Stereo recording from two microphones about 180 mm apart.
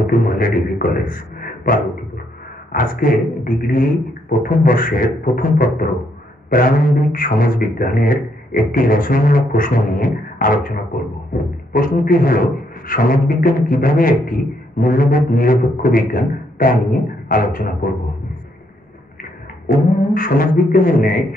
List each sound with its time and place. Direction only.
0.0 s a sound: 50° left (ahead or behind)
2.7 s a man's voice: 50° left (ahead or behind)
19.7 s a man's voice: 50° left (ahead or behind)